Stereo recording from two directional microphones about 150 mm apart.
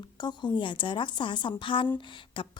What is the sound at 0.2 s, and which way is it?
A woman's voice, 30° left (ahead or behind).